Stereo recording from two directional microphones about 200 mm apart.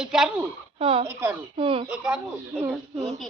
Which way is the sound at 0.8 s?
30° right (ahead or behind).